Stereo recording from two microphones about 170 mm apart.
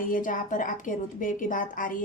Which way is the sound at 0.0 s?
50° left (ahead or behind).